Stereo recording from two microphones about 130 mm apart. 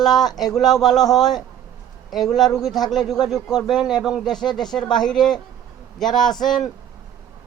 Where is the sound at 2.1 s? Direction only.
Centre (ahead or behind).